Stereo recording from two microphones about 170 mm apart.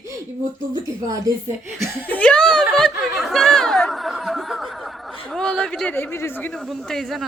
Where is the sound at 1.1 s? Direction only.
20° right (ahead or behind).